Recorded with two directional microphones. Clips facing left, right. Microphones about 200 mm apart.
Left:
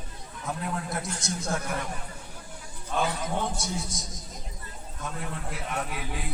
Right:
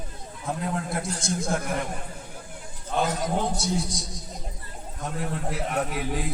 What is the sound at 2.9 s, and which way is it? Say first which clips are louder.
A man's voice: right 3 dB; 40° right (ahead or behind).